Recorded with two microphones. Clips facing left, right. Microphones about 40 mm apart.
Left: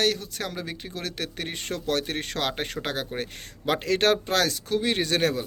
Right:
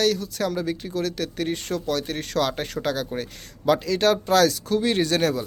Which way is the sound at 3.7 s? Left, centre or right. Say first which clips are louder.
Right 3 dB; left.